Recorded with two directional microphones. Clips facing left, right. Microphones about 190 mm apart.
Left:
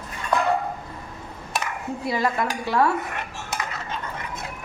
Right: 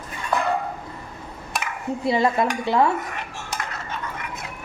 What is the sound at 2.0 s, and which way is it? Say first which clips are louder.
Dishes: right 4 dB; 25° right (ahead or behind).